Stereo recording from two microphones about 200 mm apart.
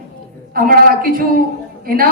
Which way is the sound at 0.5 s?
45° right (ahead or behind).